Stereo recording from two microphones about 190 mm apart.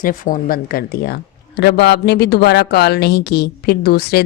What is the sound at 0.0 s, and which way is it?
Speech, 45° left (ahead or behind).